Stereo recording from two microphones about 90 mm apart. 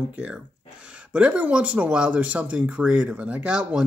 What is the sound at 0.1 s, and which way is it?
Speech, 10° right (ahead or behind).